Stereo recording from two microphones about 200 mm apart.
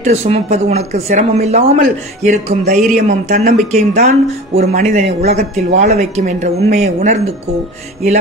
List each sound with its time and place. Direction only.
0.0 s speech: 35° right (ahead or behind)
2.6 s speech: 45° right (ahead or behind)